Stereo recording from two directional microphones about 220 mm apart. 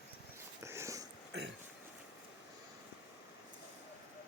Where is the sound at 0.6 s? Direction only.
10° right (ahead or behind).